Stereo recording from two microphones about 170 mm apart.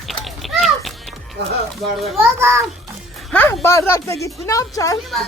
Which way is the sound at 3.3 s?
10° left (ahead or behind).